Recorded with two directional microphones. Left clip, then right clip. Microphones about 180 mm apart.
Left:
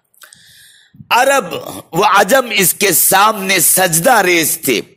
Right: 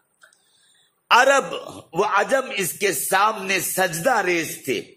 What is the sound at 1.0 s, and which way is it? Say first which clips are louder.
A man's voice: left 4 dB; 20° left (ahead or behind).